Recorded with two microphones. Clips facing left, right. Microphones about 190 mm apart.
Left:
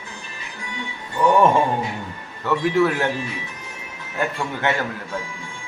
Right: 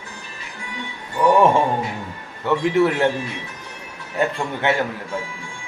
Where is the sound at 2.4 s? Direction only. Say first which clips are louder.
Right 1 dB; 20° right (ahead or behind).